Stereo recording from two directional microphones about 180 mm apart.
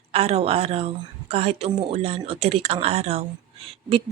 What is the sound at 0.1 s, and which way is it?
A woman's voice, 35° right (ahead or behind).